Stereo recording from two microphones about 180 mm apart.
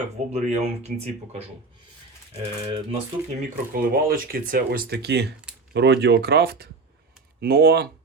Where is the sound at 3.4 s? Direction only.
55° right (ahead or behind).